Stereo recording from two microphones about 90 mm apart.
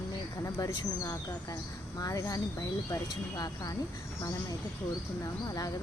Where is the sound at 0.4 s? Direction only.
35° left (ahead or behind).